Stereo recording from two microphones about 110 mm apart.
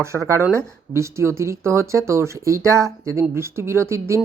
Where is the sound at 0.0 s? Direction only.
25° right (ahead or behind).